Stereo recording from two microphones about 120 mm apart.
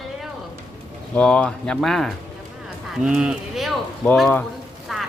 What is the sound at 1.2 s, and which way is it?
A man's voice, 10° left (ahead or behind).